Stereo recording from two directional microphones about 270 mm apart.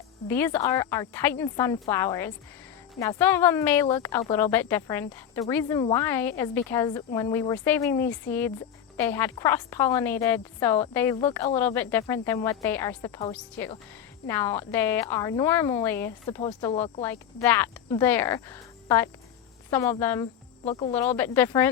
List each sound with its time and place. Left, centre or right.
0.3 s speech: centre
16.4 s speech: centre
17.0 s speech: centre
19.7 s speech: centre